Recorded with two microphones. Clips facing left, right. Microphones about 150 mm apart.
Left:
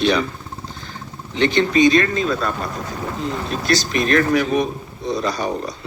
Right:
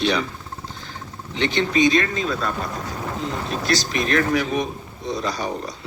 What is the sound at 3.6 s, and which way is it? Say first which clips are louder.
Speech: left 4 dB; 55° left (ahead or behind).